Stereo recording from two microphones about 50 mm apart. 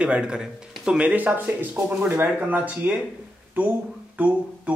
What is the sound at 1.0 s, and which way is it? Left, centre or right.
Speech, right.